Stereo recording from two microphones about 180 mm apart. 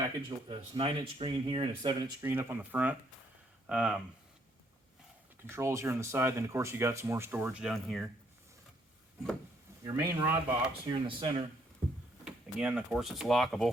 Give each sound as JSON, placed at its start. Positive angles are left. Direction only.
{"t": 0.2, "sound": "speech", "side_deg": -25}
{"t": 2.2, "sound": "speech", "side_deg": -15}
{"t": 5.5, "sound": "speech", "side_deg": -15}
{"t": 9.8, "sound": "speech", "side_deg": -15}
{"t": 10.8, "sound": "speech", "side_deg": -30}
{"t": 12.2, "sound": "speech", "side_deg": -5}